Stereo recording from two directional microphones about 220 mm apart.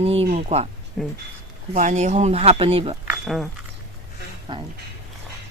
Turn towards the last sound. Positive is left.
turn(degrees=-20)  # may be behind; listen again after turning